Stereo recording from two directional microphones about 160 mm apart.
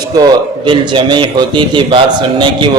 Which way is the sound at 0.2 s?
30° right (ahead or behind).